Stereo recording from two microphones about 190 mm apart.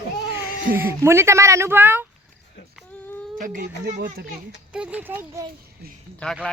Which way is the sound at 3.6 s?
45° right (ahead or behind).